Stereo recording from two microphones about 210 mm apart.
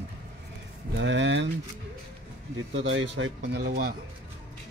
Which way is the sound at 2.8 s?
60° right (ahead or behind).